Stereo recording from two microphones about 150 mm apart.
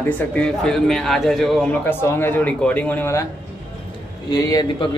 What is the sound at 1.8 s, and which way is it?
Speech, 15° left (ahead or behind).